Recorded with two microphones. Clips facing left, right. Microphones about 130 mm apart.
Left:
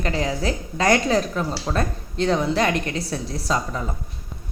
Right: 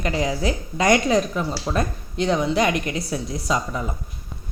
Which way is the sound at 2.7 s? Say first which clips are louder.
Even; 30° left (ahead or behind).